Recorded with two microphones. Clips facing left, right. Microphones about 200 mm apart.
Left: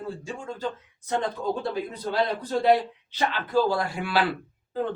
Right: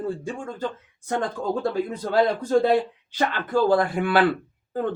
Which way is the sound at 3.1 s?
50° right (ahead or behind).